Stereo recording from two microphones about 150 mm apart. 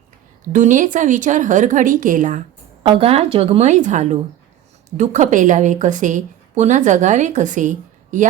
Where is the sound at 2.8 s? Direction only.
40° right (ahead or behind).